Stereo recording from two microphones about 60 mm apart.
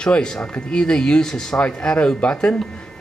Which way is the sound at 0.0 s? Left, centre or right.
Centre.